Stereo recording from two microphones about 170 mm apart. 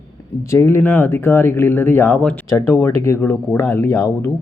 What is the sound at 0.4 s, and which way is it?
A man's voice, 15° left (ahead or behind).